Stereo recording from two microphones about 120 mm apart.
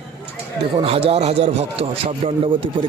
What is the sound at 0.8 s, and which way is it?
A man's voice, 55° right (ahead or behind).